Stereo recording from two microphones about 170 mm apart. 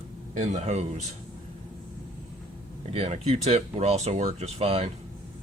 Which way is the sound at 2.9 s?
35° right (ahead or behind).